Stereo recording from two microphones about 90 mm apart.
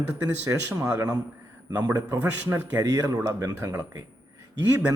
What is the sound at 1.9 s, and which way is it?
Speech, 35° right (ahead or behind).